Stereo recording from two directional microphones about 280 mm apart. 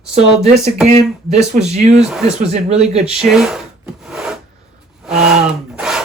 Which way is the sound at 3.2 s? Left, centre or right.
Centre.